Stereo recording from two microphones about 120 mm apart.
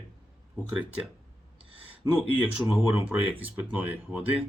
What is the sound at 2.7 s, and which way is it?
Speech, 15° right (ahead or behind).